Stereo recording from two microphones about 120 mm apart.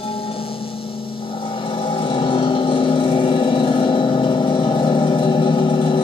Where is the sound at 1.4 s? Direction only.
45° left (ahead or behind).